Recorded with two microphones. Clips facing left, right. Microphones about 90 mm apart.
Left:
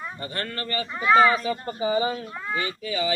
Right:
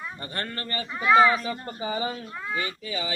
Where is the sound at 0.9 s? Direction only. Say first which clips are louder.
Even; centre (ahead or behind).